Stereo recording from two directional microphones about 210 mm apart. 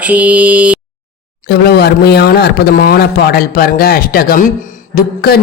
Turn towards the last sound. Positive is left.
turn(degrees=45)  # may be behind; listen again after turning